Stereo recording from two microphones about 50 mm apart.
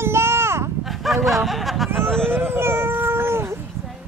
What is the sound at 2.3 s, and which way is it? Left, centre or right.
Cat, right.